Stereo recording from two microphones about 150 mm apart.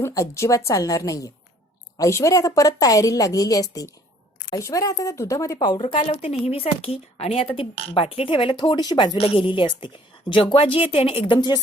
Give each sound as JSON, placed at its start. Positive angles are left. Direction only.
{"t": 0.0, "sound": "a woman's voice", "side_deg": 20}
{"t": 6.0, "sound": "a woman's voice", "side_deg": 45}
{"t": 9.1, "sound": "a woman's voice", "side_deg": 40}